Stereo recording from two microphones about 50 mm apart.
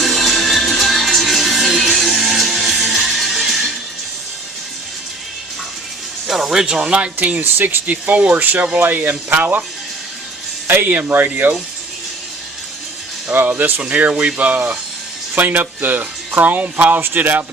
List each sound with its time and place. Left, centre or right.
0.0 s music: centre
6.2 s speech: centre; by 9.6 s right
10.7 s speech: right
13.4 s speech: right
13.8 s speech: right